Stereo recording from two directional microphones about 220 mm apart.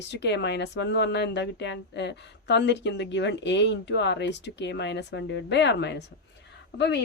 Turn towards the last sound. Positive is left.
turn(degrees=50)  # may be behind; listen again after turning